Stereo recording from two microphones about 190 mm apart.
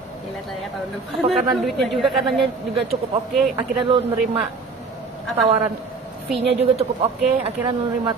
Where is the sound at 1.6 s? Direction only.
Centre (ahead or behind).